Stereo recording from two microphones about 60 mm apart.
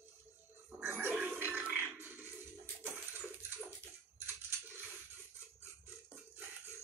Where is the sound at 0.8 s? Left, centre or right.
Right.